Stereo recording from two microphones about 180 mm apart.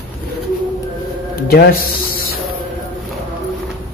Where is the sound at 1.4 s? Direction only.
60° left (ahead or behind).